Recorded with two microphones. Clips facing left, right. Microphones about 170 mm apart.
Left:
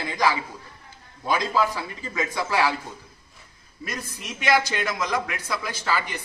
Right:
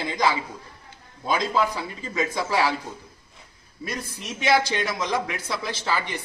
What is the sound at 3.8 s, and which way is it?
Speech, 25° right (ahead or behind).